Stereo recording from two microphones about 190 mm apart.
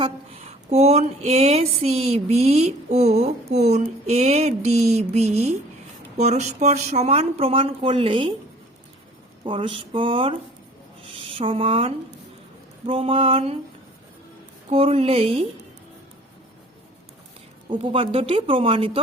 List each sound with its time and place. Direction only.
0.0 s speech: 35° right (ahead or behind)
9.4 s speech: 25° right (ahead or behind)
14.7 s speech: 30° right (ahead or behind)
17.7 s speech: 25° right (ahead or behind)